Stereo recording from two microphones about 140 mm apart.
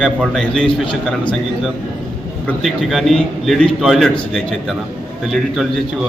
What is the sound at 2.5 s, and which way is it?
A man's voice, centre (ahead or behind).